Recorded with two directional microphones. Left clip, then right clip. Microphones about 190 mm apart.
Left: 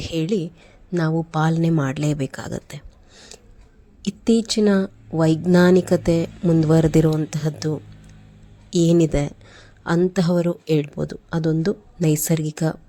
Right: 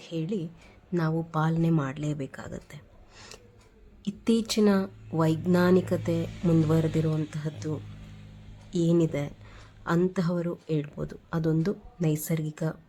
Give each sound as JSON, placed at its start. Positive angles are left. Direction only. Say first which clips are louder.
{"t": 0.0, "sound": "speech", "louder": "left 10 dB", "side_deg": 35}
{"t": 4.2, "sound": "speech", "louder": "left 6 dB", "side_deg": 20}